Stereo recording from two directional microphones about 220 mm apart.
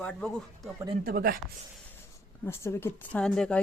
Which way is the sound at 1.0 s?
40° right (ahead or behind).